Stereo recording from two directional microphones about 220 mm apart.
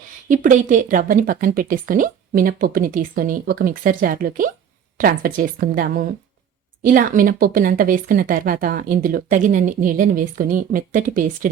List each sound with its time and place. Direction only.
0.3 s a woman's voice: 35° right (ahead or behind)